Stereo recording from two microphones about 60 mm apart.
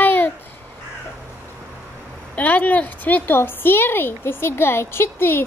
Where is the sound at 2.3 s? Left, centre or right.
Left.